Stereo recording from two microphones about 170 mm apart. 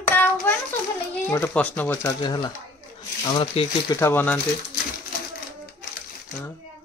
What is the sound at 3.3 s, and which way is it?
Singing, 25° left (ahead or behind).